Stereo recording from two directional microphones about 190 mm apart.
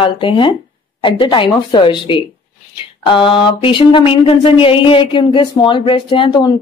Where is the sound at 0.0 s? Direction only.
25° left (ahead or behind).